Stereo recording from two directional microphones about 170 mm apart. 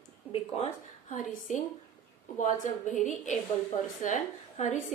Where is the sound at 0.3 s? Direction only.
40° left (ahead or behind).